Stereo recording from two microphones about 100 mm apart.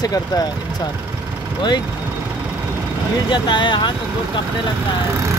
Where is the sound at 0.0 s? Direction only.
40° left (ahead or behind).